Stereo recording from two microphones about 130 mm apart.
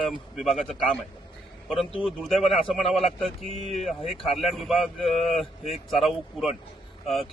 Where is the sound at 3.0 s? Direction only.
55° left (ahead or behind).